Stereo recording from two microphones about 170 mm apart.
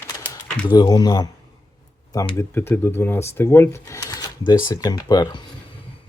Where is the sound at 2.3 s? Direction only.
15° left (ahead or behind).